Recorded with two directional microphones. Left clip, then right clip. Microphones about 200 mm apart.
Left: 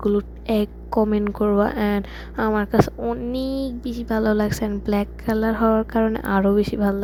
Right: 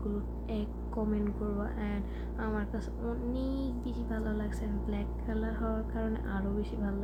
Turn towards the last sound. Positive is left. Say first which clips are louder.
# left 17 dB
turn(degrees=50)  # may be behind; listen again after turning